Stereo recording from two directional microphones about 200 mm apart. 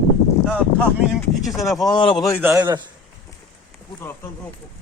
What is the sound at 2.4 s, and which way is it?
Speech, 10° right (ahead or behind).